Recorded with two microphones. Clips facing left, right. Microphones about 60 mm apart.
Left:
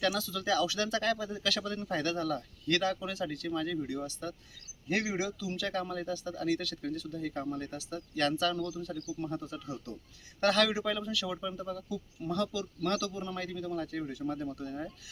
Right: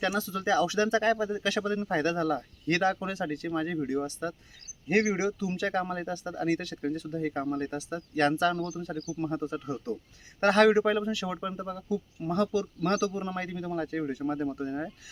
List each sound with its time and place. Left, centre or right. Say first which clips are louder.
0.0 s speech: right 3 dB; right